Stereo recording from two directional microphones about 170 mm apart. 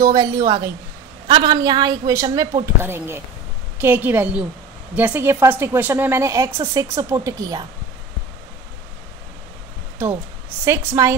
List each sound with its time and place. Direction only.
0.0 s a woman's voice: 20° right (ahead or behind)
10.6 s a woman's voice: 15° right (ahead or behind)